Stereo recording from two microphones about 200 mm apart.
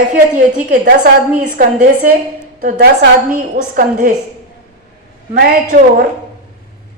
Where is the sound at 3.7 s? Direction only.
40° right (ahead or behind).